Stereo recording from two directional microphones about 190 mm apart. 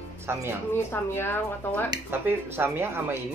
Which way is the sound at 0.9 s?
10° left (ahead or behind).